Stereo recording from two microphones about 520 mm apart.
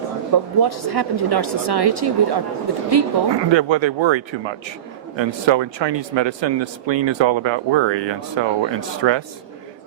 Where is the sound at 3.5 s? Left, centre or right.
Right.